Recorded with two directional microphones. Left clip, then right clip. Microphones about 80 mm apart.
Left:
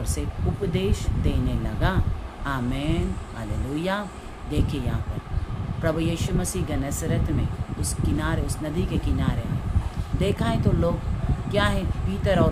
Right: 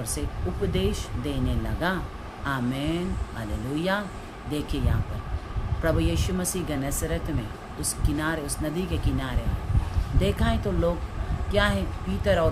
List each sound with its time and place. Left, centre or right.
0.7 s speech: centre